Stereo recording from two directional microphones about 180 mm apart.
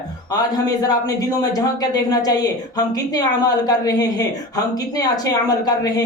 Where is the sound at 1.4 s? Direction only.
20° left (ahead or behind).